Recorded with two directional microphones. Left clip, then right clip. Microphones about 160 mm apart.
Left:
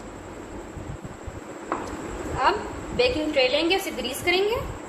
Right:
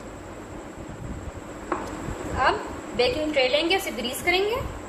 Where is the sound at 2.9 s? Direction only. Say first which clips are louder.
Left 1 dB; 25° left (ahead or behind).